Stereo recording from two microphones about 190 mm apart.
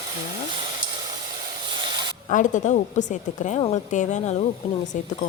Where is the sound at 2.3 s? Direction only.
40° left (ahead or behind).